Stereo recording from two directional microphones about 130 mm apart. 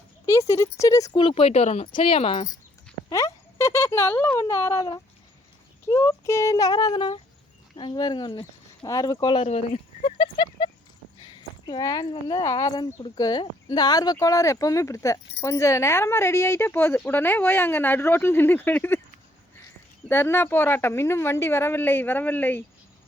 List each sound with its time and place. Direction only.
0.3 s speech: 20° left (ahead or behind)
1.2 s speech: 45° left (ahead or behind)
1.9 s speech: 45° left (ahead or behind)
3.1 s speech: 25° left (ahead or behind)
9.5 s speech: 50° left (ahead or behind); by 18.9 s 15° left (ahead or behind)
20.1 s a woman's voice: 15° left (ahead or behind)